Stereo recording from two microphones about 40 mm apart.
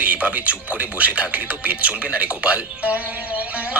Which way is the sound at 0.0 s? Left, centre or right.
Right.